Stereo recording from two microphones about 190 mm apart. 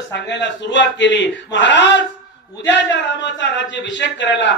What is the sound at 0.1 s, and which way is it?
A man's voice, 65° left (ahead or behind).